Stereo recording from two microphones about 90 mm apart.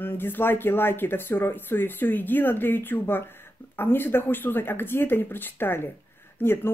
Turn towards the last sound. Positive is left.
turn(degrees=20)  # may be behind; listen again after turning